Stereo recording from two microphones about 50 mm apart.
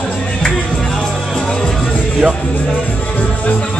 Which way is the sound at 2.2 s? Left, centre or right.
Centre.